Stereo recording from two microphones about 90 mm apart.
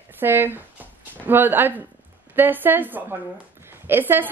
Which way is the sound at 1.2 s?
25° right (ahead or behind).